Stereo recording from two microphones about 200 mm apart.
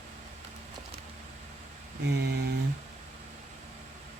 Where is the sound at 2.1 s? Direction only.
55° right (ahead or behind).